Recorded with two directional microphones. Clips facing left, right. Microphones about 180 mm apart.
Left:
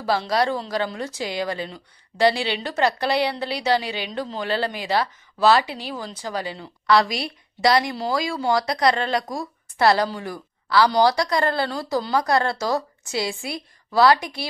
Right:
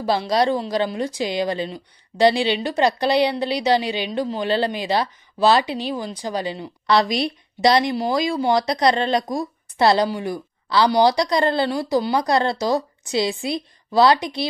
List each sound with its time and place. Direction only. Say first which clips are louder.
0.0 s speech: right 2 dB; 20° right (ahead or behind)